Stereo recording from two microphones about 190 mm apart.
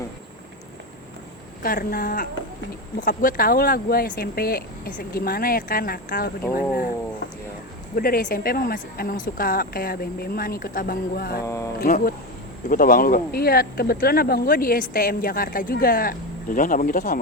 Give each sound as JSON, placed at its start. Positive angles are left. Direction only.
{"t": 1.6, "sound": "speech", "side_deg": 50}
{"t": 7.9, "sound": "speech", "side_deg": 50}
{"t": 11.4, "sound": "speech", "side_deg": 15}
{"t": 11.8, "sound": "speech", "side_deg": 50}